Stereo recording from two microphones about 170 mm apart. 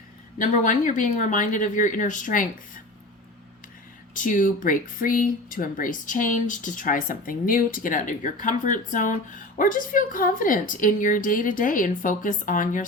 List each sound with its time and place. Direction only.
0.3 s speech: 50° left (ahead or behind)
4.1 s speech: 50° left (ahead or behind)